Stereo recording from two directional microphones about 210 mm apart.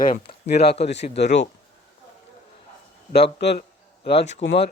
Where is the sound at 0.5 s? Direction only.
50° left (ahead or behind).